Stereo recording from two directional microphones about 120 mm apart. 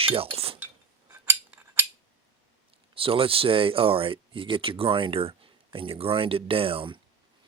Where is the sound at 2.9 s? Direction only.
50° right (ahead or behind).